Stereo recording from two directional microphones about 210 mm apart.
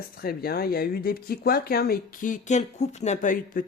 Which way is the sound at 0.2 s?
45° left (ahead or behind).